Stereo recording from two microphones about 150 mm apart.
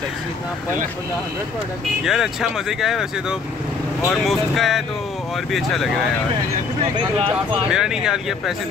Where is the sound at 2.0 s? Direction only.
5° right (ahead or behind).